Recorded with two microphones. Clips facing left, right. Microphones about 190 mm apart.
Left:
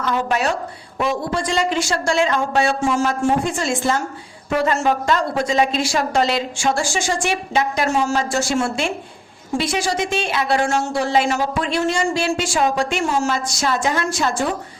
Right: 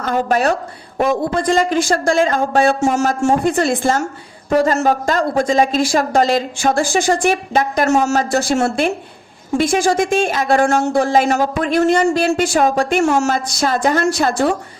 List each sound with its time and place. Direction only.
0.0 s a woman's voice: 45° right (ahead or behind)
3.2 s a woman's voice: 60° right (ahead or behind)
4.4 s a woman's voice: 40° right (ahead or behind)
14.3 s a woman's voice: 65° right (ahead or behind)